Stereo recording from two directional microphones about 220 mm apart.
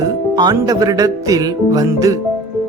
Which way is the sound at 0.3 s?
20° right (ahead or behind).